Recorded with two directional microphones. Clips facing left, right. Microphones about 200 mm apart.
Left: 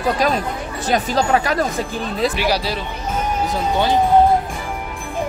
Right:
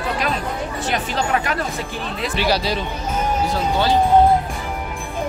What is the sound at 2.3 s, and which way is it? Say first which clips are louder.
Speech: even; 10° left (ahead or behind).